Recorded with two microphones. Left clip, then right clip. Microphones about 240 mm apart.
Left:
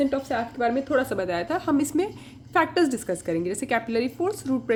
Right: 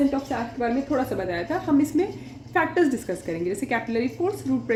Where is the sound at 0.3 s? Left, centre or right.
Left.